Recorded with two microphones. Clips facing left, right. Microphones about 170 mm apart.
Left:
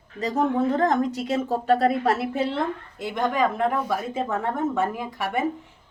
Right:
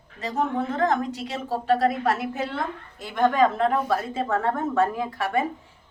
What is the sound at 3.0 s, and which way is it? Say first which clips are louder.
A woman's voice: right 3 dB; 20° left (ahead or behind).